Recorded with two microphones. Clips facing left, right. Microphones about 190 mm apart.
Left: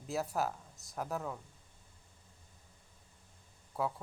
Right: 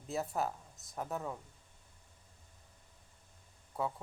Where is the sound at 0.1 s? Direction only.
Centre (ahead or behind).